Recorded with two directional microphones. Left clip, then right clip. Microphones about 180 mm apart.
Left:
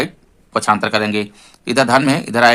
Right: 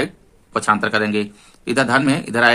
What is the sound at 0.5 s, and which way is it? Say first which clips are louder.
A man's voice: left 2 dB; 30° left (ahead or behind).